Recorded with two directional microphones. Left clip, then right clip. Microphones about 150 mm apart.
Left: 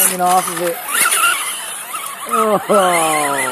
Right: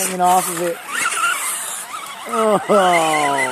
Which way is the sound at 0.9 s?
60° left (ahead or behind).